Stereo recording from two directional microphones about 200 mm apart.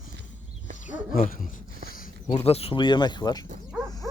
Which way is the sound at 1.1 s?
45° left (ahead or behind).